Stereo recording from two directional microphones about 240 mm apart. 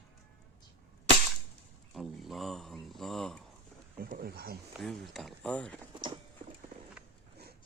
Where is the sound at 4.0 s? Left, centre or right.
Right.